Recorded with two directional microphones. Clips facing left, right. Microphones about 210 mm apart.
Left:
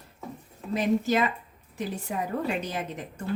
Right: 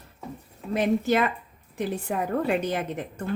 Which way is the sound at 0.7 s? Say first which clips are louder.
Right 2 dB; 55° right (ahead or behind).